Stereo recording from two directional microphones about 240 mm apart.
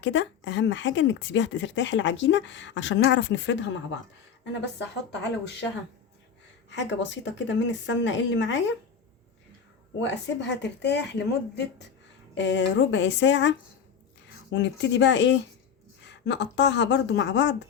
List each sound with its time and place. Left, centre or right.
0.0 s speech: left
4.8 s speech: left
6.7 s speech: left
10.0 s speech: left